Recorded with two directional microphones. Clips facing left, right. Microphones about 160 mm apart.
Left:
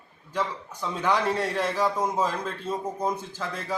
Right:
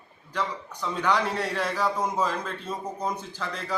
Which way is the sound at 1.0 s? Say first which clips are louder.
Left 1 dB; 5° left (ahead or behind).